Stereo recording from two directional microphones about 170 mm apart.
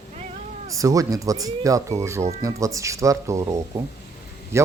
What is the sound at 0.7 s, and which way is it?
A man's voice, 20° right (ahead or behind).